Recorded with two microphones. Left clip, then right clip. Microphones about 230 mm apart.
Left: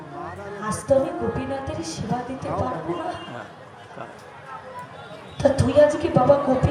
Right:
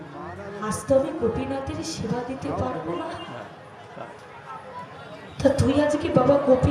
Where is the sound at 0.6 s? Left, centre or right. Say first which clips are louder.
Left 1 dB; right.